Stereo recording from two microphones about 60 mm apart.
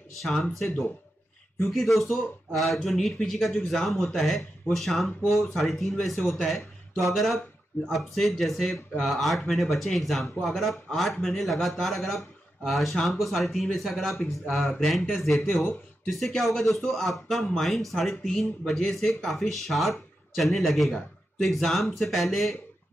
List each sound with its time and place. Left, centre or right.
0.4 s speech: centre